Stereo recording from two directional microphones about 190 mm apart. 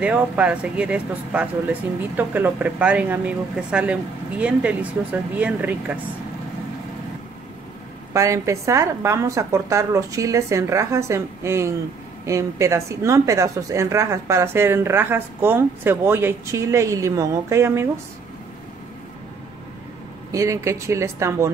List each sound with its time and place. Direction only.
0.0 s speech: 5° right (ahead or behind)
8.1 s speech: 15° right (ahead or behind)
20.2 s speech: 15° right (ahead or behind)